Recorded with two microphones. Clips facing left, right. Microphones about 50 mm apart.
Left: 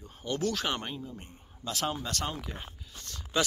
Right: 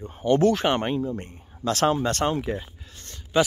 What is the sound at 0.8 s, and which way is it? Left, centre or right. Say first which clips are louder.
Speech: right 13 dB; right.